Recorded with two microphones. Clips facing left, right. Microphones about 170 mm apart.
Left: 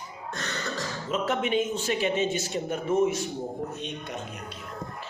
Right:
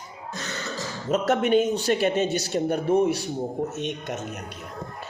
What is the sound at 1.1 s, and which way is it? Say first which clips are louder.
A woman's voice: right 6 dB; 40° right (ahead or behind).